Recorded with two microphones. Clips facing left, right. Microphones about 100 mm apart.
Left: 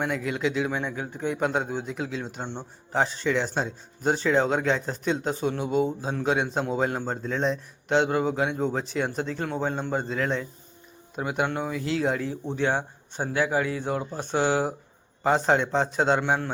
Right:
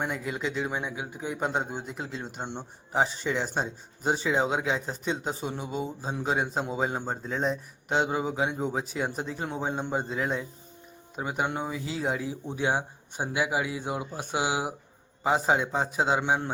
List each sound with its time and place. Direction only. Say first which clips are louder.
0.0 s a man's voice: left 4 dB; 5° right (ahead or behind)
2.4 s speech: left 1 dB; 15° right (ahead or behind)
2.9 s a man's voice: left 2 dB; 5° right (ahead or behind)